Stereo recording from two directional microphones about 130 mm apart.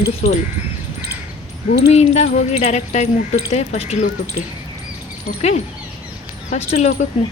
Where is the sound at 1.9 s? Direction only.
55° left (ahead or behind).